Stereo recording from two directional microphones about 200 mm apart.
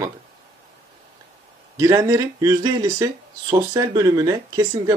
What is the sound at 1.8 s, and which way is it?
Speech, 15° right (ahead or behind).